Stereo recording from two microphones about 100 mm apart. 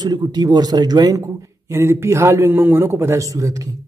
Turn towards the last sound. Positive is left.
turn(degrees=-30)  # may be behind; listen again after turning